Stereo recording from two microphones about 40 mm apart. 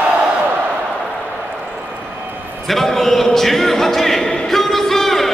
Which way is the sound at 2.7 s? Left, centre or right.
Centre.